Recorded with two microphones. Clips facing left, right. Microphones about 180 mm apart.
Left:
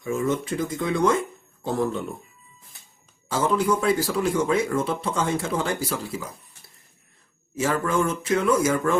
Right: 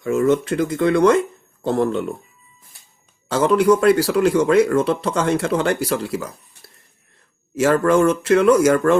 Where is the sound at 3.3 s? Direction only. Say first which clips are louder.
Right 7 dB; 70° right (ahead or behind).